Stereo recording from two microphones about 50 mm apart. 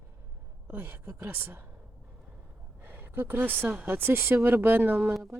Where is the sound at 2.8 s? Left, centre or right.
Right.